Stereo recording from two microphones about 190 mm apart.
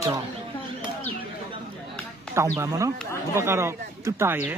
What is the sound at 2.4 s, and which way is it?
Speech, 15° right (ahead or behind).